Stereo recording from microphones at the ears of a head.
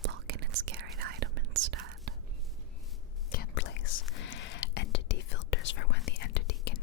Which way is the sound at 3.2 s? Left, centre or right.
Left.